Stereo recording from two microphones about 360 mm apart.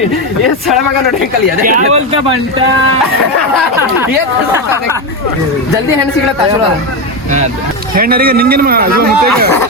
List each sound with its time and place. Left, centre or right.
1.6 s speech: centre
7.9 s speech: right